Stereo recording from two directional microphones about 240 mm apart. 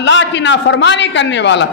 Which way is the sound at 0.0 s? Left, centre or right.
Left.